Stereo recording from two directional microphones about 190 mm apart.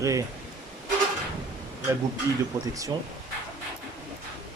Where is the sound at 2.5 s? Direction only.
15° right (ahead or behind).